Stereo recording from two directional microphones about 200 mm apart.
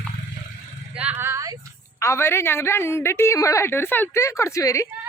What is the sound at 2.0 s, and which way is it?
A woman's voice, 15° left (ahead or behind).